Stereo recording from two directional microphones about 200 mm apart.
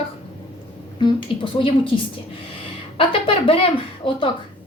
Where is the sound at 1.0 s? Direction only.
25° left (ahead or behind).